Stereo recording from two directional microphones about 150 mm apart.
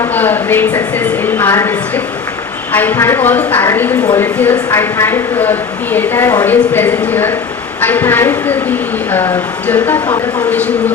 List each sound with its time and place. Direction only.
0.0 s speech: 10° left (ahead or behind)
2.7 s speech: 15° left (ahead or behind)
9.6 s speech: 10° left (ahead or behind)